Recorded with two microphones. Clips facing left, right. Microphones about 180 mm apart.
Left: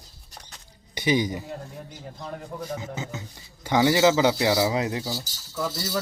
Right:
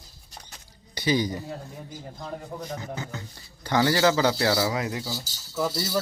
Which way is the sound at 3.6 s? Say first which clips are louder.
Left 2 dB; 20° left (ahead or behind).